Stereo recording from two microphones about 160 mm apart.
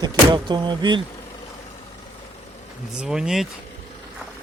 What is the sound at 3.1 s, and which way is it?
Speech, 5° right (ahead or behind).